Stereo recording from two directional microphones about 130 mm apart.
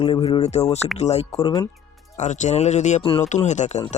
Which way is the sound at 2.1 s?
65° left (ahead or behind).